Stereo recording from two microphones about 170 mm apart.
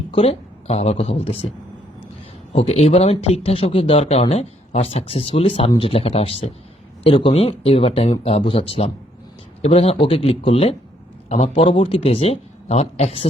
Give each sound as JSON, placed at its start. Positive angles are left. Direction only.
{"t": 0.1, "sound": "a woman's voice", "side_deg": 35}
{"t": 2.5, "sound": "speech", "side_deg": 35}